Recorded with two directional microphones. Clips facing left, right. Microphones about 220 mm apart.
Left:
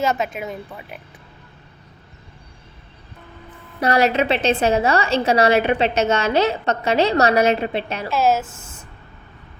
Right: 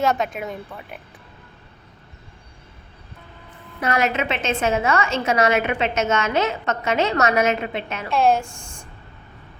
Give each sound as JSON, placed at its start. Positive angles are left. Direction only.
{"t": 0.0, "sound": "speech", "side_deg": 0}
{"t": 3.8, "sound": "a woman's voice", "side_deg": 35}
{"t": 8.1, "sound": "a woman's voice", "side_deg": 5}